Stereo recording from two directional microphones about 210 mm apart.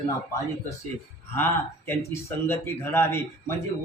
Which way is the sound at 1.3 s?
10° left (ahead or behind).